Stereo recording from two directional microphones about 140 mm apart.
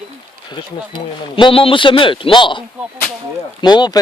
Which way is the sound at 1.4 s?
40° left (ahead or behind).